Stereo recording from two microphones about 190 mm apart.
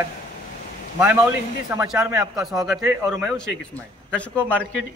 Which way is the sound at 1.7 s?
15° right (ahead or behind).